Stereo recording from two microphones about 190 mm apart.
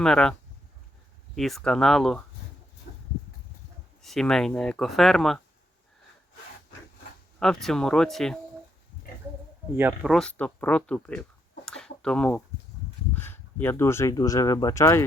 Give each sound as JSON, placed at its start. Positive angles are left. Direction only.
{"t": 0.0, "sound": "speech", "side_deg": 5}
{"t": 1.4, "sound": "speech", "side_deg": 0}
{"t": 2.9, "sound": "a sound", "side_deg": 50}
{"t": 4.0, "sound": "speech", "side_deg": 0}
{"t": 7.3, "sound": "speech", "side_deg": 5}
{"t": 9.7, "sound": "speech", "side_deg": -10}
{"t": 10.1, "sound": "speech", "side_deg": 5}